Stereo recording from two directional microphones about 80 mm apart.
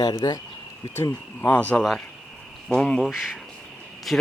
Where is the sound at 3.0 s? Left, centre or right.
Centre.